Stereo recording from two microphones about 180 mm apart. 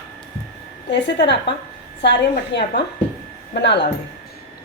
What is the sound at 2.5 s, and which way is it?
A woman's voice, 70° left (ahead or behind).